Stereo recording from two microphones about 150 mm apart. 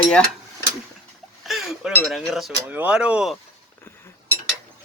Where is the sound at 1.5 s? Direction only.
Centre (ahead or behind).